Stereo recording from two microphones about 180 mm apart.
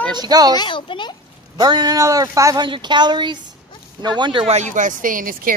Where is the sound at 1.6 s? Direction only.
25° right (ahead or behind).